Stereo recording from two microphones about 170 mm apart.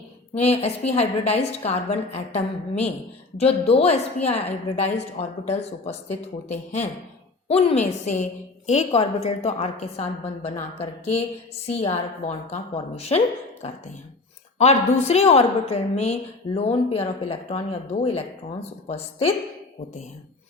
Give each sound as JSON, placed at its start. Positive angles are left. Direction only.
{"t": 0.6, "sound": "a woman's voice", "side_deg": 40}
{"t": 15.0, "sound": "a woman's voice", "side_deg": 40}